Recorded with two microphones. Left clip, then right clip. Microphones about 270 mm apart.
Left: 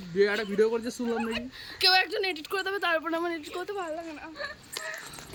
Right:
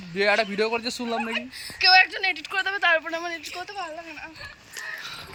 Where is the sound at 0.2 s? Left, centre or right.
Centre.